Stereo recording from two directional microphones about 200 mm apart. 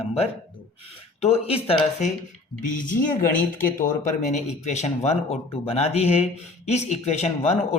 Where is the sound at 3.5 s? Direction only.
40° left (ahead or behind).